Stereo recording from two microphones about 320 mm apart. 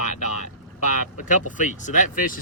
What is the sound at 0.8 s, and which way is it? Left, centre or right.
Speech, left.